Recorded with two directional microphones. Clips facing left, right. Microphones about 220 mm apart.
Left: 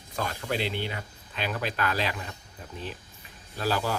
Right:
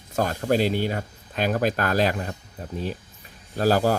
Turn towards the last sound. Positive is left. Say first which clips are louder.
# right 8 dB
turn(degrees=-45)  # may be behind; listen again after turning